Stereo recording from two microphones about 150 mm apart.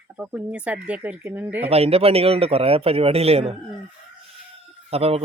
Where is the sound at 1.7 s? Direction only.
40° right (ahead or behind).